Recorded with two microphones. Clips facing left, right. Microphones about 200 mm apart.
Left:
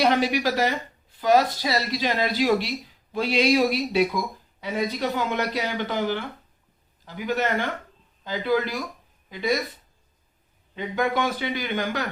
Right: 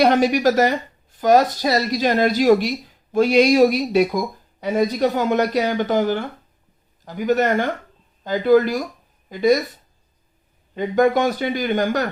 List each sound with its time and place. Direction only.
0.0 s speech: 45° right (ahead or behind)
10.8 s speech: 45° right (ahead or behind)